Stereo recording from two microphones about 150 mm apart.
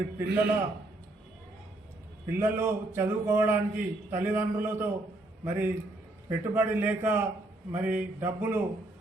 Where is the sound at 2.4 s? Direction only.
15° right (ahead or behind).